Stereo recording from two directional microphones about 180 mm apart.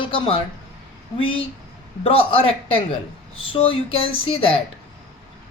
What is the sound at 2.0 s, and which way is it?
Speech, 30° left (ahead or behind).